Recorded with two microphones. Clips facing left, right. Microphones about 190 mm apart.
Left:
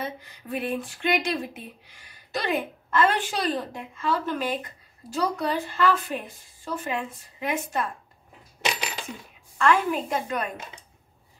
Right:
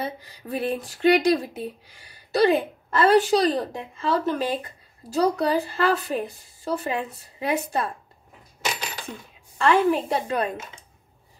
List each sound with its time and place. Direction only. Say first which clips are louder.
0.0 s speech: right 3 dB; 35° right (ahead or behind)
9.6 s speech: right 3 dB; 35° right (ahead or behind)